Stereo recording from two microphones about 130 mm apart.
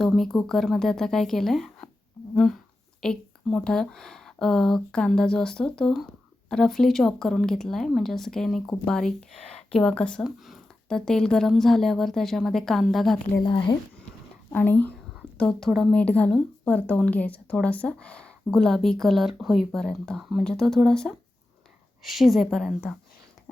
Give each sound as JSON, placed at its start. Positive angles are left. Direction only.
{"t": 0.0, "sound": "speech", "side_deg": 0}
{"t": 13.4, "sound": "speech", "side_deg": 40}
{"t": 14.5, "sound": "speech", "side_deg": 15}
{"t": 15.4, "sound": "speech", "side_deg": 5}